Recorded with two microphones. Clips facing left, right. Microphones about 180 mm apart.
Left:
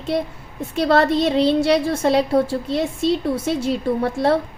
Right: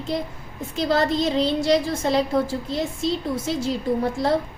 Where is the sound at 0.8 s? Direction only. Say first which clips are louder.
Left 4 dB; 65° left (ahead or behind).